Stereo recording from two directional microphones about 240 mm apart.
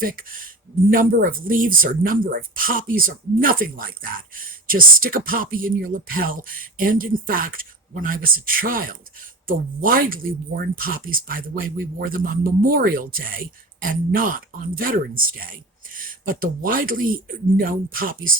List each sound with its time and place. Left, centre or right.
0.0 s speech: right